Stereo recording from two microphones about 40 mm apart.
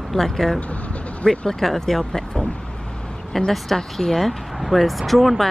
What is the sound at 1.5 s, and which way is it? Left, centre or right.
Speech, centre.